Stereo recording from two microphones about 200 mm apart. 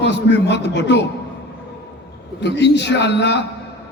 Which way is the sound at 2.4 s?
60° left (ahead or behind).